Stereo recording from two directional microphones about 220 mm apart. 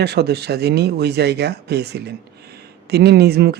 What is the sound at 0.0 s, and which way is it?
Speech, 50° right (ahead or behind).